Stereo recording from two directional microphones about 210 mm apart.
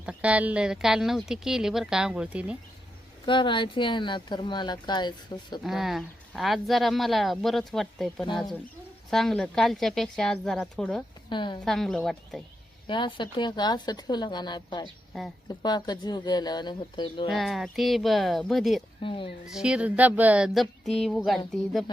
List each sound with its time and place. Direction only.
0.0 s speech: 5° right (ahead or behind)
3.2 s speech: 25° left (ahead or behind)
5.6 s speech: centre (ahead or behind)
11.3 s speech: 20° left (ahead or behind)
11.6 s speech: centre (ahead or behind)
12.9 s speech: 20° left (ahead or behind)
17.3 s speech: centre (ahead or behind)
19.0 s speech: 25° left (ahead or behind)
19.5 s speech: 5° right (ahead or behind)